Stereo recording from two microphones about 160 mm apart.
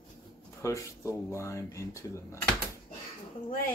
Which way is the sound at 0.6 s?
20° left (ahead or behind).